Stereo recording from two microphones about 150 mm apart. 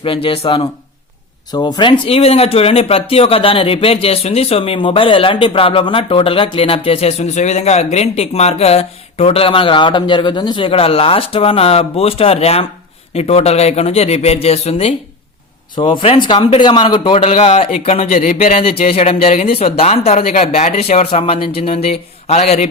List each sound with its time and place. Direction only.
0.0 s speech: 35° left (ahead or behind)
15.7 s speech: 35° left (ahead or behind); by 18.5 s 55° left (ahead or behind)
18.5 s speech: 40° left (ahead or behind)